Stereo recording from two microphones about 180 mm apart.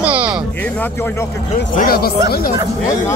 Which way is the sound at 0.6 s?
10° left (ahead or behind).